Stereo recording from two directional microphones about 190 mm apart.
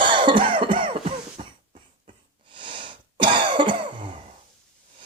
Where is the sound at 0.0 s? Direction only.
25° right (ahead or behind).